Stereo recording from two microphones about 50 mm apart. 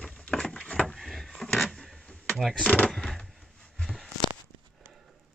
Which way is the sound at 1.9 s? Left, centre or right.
Centre.